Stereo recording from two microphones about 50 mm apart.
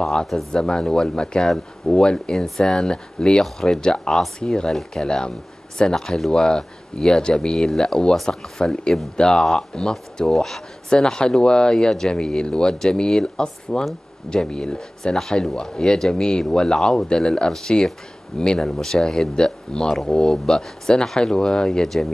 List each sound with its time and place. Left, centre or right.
0.0 s speech: centre